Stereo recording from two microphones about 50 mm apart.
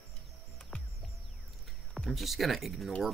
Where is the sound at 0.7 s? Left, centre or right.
Left.